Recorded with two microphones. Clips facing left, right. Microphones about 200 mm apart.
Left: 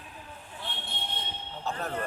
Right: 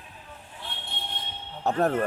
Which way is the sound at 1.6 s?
60° right (ahead or behind).